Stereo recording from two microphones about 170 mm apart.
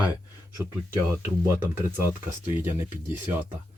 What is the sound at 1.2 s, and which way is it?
Speech, 15° right (ahead or behind).